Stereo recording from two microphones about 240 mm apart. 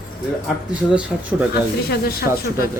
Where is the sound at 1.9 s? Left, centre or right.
Left.